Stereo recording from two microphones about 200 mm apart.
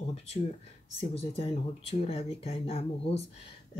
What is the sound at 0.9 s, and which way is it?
Speech, 30° left (ahead or behind).